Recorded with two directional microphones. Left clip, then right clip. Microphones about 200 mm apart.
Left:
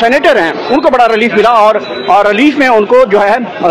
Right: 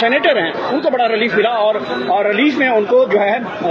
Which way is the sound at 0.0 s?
15° left (ahead or behind).